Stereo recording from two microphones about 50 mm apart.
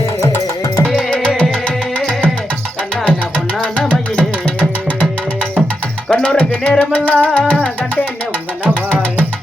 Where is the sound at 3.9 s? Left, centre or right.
Left.